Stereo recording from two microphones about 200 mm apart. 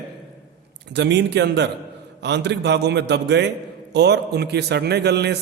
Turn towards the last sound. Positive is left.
turn(degrees=-55)  # may be behind; listen again after turning